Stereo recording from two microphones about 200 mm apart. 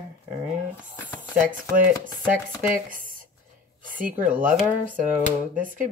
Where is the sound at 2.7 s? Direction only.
45° right (ahead or behind).